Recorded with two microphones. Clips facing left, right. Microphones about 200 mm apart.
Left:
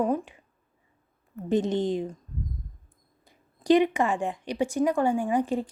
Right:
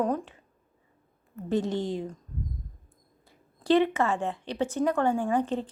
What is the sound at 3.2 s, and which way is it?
Speech, 15° left (ahead or behind).